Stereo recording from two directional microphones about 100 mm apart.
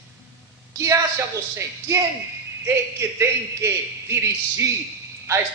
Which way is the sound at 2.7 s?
30° right (ahead or behind).